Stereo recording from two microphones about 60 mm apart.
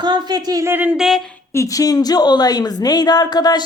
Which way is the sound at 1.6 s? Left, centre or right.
Left.